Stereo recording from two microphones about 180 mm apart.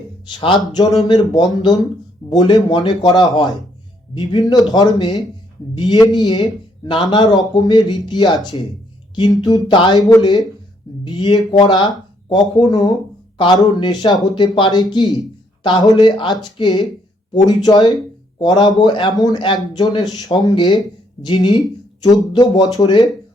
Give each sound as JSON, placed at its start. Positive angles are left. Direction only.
{"t": 0.3, "sound": "speech", "side_deg": 25}
{"t": 9.4, "sound": "speech", "side_deg": 25}